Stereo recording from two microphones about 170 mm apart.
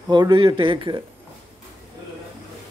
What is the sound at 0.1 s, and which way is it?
Speech, 25° right (ahead or behind).